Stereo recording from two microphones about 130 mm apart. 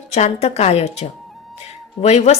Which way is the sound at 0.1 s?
55° left (ahead or behind).